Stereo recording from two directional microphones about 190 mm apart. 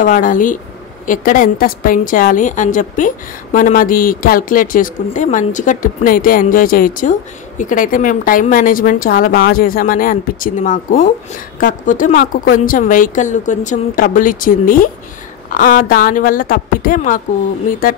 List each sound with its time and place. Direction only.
0.0 s a woman's voice: 45° left (ahead or behind)